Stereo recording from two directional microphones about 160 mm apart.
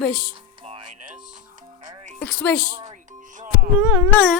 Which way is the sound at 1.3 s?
55° right (ahead or behind).